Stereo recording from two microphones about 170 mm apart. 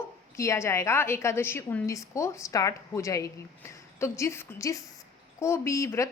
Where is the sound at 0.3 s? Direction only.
15° left (ahead or behind).